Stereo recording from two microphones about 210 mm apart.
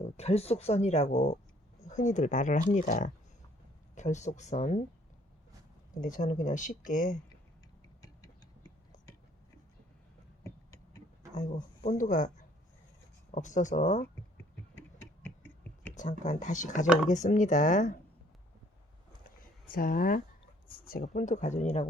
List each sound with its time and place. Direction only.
0.0 s speech: 30° left (ahead or behind)
5.9 s speech: 40° left (ahead or behind)
8.0 s tick: 15° left (ahead or behind)
10.4 s a sound: 15° left (ahead or behind)
11.3 s speech: 35° left (ahead or behind)
13.3 s speech: 35° left (ahead or behind)
14.8 s a sound: 10° left (ahead or behind)
16.2 s speech: 35° left (ahead or behind)
16.8 s speech: 5° right (ahead or behind)
17.1 s speech: 35° left (ahead or behind)
19.7 s speech: 45° left (ahead or behind)